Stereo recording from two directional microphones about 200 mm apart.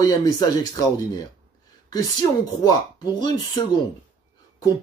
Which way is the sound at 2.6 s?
20° left (ahead or behind).